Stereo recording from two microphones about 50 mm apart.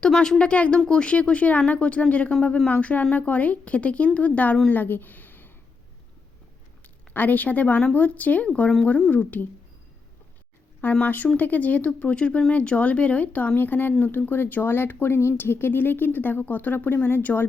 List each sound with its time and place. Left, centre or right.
0.1 s a woman's voice: centre; by 5.5 s left
7.1 s speech: left
11.0 s speech: left
12.1 s a woman's voice: left